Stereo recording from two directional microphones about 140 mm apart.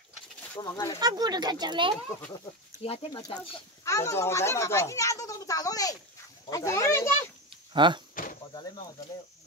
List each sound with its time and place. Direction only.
0.6 s speech: 25° left (ahead or behind)
0.9 s speech: 30° right (ahead or behind)
2.8 s speech: 45° left (ahead or behind)
3.8 s speech: 20° left (ahead or behind)
7.7 s speech: 35° right (ahead or behind)
8.1 s insect: 70° left (ahead or behind)